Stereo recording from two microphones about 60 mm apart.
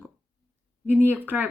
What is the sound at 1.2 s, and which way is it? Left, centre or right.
Speech, right.